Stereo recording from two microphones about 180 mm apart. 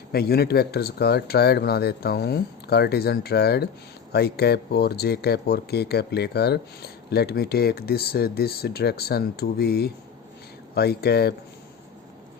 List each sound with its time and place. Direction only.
0.1 s speech: 60° left (ahead or behind)